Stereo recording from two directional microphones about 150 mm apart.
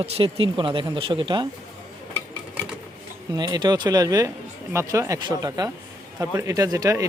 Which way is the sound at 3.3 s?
30° right (ahead or behind).